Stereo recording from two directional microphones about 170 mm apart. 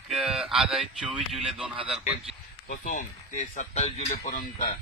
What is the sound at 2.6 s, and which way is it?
Speech, 50° left (ahead or behind).